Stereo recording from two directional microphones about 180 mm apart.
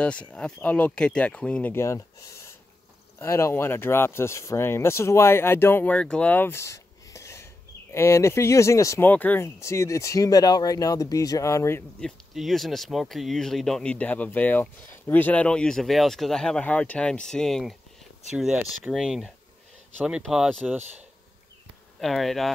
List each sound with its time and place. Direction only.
0.0 s speech: 5° left (ahead or behind)
12.0 s speech: centre (ahead or behind)
22.0 s speech: centre (ahead or behind)